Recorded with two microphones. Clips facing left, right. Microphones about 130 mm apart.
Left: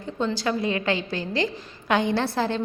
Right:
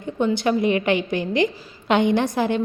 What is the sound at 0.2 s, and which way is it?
A woman's voice, 20° right (ahead or behind).